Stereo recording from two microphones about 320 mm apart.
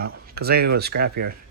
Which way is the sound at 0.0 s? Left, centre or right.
Right.